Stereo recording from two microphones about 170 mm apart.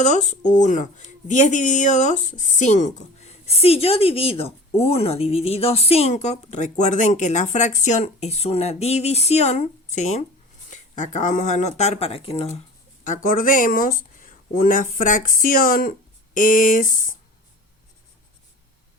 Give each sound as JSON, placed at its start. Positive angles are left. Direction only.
{"t": 0.0, "sound": "a woman's voice", "side_deg": 45}
{"t": 13.1, "sound": "speech", "side_deg": 55}